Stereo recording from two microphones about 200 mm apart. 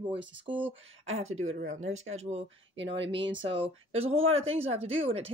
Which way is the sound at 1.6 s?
40° right (ahead or behind).